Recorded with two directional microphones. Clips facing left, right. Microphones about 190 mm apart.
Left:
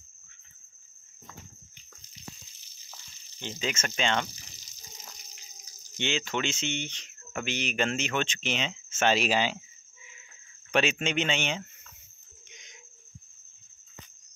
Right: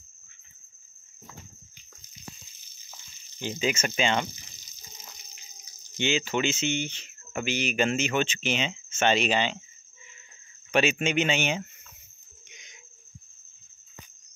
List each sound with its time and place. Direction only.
3.3 s speech: 10° right (ahead or behind)
5.9 s speech: 5° right (ahead or behind)
10.7 s speech: 5° right (ahead or behind)
12.4 s a sound: 5° right (ahead or behind)